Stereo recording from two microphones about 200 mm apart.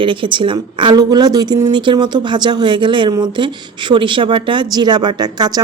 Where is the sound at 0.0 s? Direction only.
25° right (ahead or behind).